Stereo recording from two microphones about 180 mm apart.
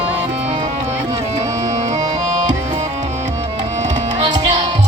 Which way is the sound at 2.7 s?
40° right (ahead or behind).